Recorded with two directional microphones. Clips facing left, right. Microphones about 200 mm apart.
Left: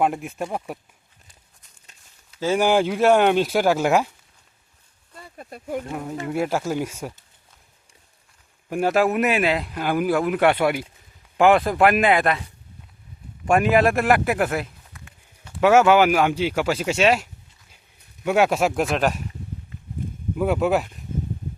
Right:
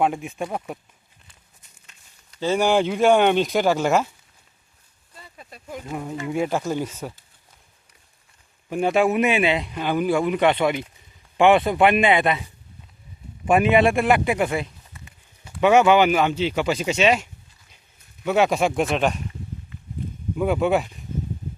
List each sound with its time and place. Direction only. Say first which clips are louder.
0.0 s speech: even; centre (ahead or behind)
2.3 s speech: left 1 dB; 10° left (ahead or behind)
5.1 s a sound: left 5 dB; 50° left (ahead or behind)
5.9 s speech: even; centre (ahead or behind)
8.7 s speech: even; 5° left (ahead or behind)
13.4 s a sound: right 1 dB; centre (ahead or behind)
15.6 s speech: even; 5° left (ahead or behind)
18.3 s speech: even; 5° left (ahead or behind)
20.3 s speech: even; centre (ahead or behind)